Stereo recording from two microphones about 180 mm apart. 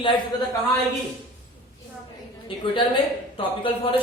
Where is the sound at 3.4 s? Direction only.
30° left (ahead or behind).